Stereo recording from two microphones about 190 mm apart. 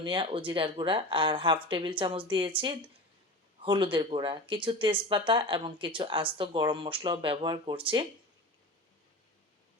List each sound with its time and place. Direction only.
0.0 s speech: 25° right (ahead or behind)